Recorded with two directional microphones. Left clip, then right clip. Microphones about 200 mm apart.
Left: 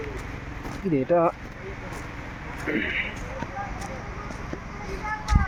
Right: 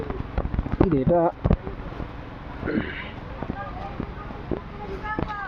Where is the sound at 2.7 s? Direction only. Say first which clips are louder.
Left 1 dB; 10° right (ahead or behind).